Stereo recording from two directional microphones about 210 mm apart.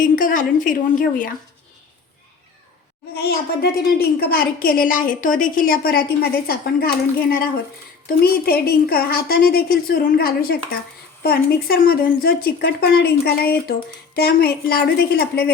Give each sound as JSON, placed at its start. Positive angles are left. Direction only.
{"t": 0.0, "sound": "a woman's voice", "side_deg": 40}
{"t": 3.2, "sound": "a woman's voice", "side_deg": 45}